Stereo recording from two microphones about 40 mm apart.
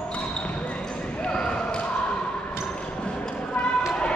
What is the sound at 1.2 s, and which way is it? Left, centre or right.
Basketball bounce, left.